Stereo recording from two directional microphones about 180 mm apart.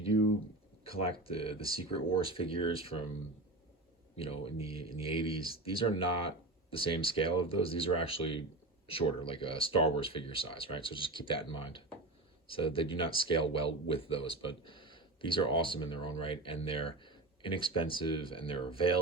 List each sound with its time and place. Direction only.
1.2 s speech: 30° left (ahead or behind)
4.2 s speech: 30° left (ahead or behind)